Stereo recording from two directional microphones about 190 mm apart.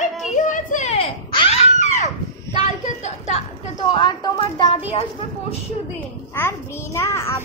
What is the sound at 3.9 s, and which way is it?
A woman's voice, 25° left (ahead or behind).